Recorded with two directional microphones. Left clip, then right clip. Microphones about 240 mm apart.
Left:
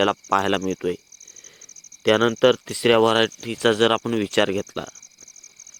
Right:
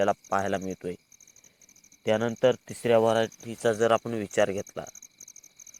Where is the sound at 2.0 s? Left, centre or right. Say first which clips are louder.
Left 7 dB; left.